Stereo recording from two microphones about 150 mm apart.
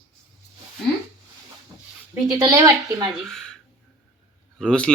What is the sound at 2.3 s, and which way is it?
A child's voice, 25° right (ahead or behind).